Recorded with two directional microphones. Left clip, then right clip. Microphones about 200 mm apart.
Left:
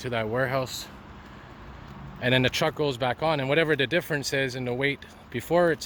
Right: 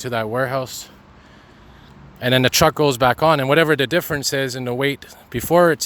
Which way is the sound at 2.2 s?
40° right (ahead or behind).